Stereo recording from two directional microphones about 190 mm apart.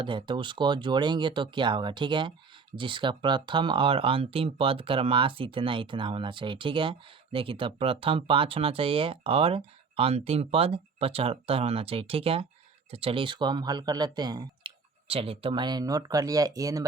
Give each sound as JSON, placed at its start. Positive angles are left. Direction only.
{"t": 0.0, "sound": "speech", "side_deg": -25}